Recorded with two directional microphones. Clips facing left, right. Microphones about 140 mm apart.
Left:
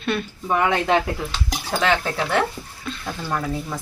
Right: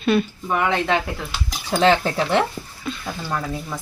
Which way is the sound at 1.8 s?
25° right (ahead or behind).